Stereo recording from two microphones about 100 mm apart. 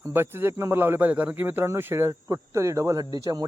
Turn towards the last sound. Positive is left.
turn(degrees=-40)  # may be behind; listen again after turning